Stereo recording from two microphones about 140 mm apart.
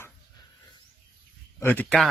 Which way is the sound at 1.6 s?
10° left (ahead or behind).